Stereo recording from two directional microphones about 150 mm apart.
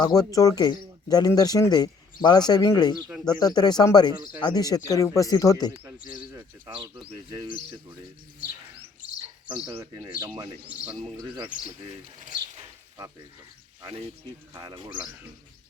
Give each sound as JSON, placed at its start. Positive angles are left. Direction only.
{"t": 0.0, "sound": "a man's voice", "side_deg": 25}
{"t": 9.6, "sound": "speech", "side_deg": -20}
{"t": 14.5, "sound": "speech", "side_deg": -30}